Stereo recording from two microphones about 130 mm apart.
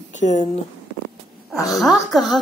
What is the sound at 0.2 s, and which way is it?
Speech, 65° left (ahead or behind).